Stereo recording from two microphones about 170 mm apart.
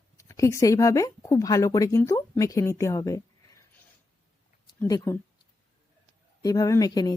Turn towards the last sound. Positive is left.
turn(degrees=20)  # may be behind; listen again after turning